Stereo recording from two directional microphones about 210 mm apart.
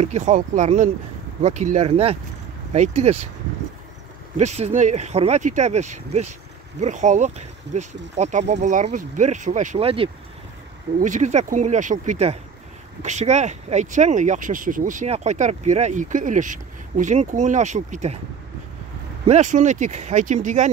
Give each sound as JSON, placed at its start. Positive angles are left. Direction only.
{"t": 0.0, "sound": "speech", "side_deg": -35}
{"t": 4.4, "sound": "speech", "side_deg": -30}
{"t": 19.2, "sound": "speech", "side_deg": -35}